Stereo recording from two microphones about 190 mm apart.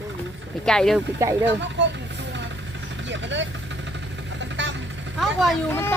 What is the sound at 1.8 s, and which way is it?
Vehicle, 70° right (ahead or behind).